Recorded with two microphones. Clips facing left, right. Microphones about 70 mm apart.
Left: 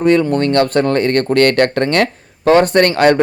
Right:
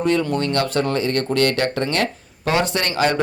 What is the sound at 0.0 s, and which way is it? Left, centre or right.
Speech, left.